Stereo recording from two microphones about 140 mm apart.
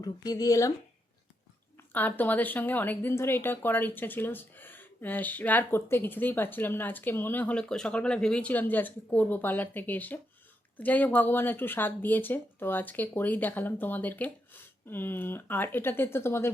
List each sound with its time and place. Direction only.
0.0 s speech: 25° left (ahead or behind)
1.9 s a woman's voice: 15° left (ahead or behind)